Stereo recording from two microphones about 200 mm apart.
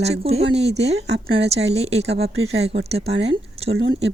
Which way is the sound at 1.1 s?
55° right (ahead or behind).